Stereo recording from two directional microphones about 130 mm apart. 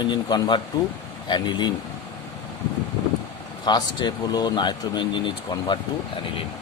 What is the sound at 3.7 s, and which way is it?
Speech, 35° left (ahead or behind).